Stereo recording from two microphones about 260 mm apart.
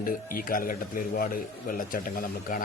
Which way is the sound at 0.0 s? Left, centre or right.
Left.